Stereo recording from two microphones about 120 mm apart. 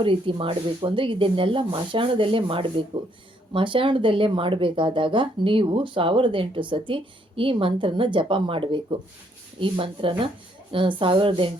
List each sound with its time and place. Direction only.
0.0 s speech: 45° right (ahead or behind)